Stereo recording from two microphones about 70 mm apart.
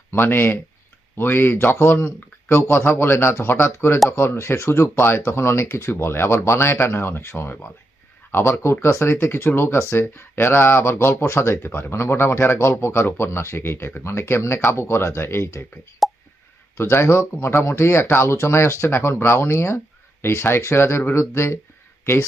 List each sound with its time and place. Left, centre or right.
0.1 s speech: left
16.0 s plop: centre
16.7 s speech: left